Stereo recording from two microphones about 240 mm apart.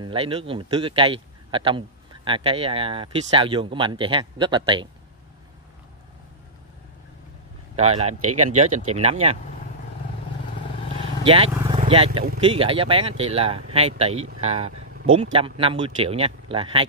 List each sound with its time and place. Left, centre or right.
0.0 s a man's voice: right
7.7 s a man's voice: right
11.2 s a man's voice: right